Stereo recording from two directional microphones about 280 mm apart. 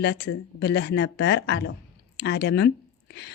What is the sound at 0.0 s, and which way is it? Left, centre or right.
A woman's voice, left.